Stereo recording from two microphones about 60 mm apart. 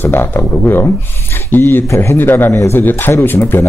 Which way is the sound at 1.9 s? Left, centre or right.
Left.